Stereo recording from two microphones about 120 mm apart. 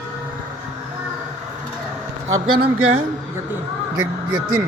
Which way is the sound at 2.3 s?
45° right (ahead or behind).